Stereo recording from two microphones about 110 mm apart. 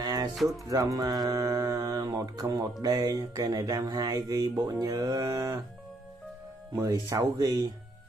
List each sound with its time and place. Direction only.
0.0 s music: 35° right (ahead or behind)
0.3 s speech: centre (ahead or behind)
0.7 s music: 35° right (ahead or behind)
6.7 s music: 30° right (ahead or behind)